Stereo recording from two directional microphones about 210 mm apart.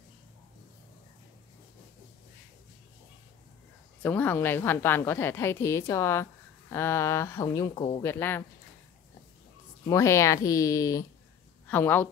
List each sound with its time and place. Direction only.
4.0 s speech: 10° left (ahead or behind)
7.7 s speech: 25° left (ahead or behind)
8.0 s speech: 10° left (ahead or behind)
9.8 s speech: 15° left (ahead or behind)